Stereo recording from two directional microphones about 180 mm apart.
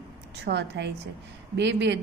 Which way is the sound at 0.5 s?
70° right (ahead or behind).